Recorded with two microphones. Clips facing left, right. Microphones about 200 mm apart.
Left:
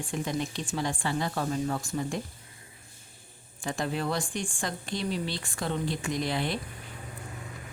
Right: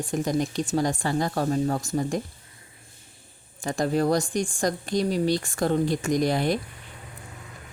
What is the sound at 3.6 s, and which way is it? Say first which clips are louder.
Speech: right 7 dB; 40° right (ahead or behind).